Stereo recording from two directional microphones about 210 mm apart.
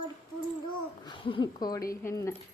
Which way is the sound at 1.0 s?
25° left (ahead or behind).